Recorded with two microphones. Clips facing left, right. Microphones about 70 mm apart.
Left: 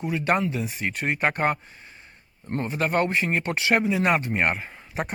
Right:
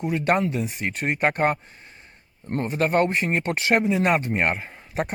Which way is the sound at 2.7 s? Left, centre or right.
Right.